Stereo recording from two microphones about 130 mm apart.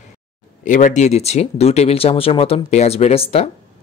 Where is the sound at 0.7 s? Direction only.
80° left.